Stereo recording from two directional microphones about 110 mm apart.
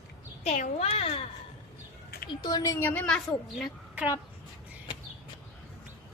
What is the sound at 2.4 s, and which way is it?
Speech, 35° left (ahead or behind).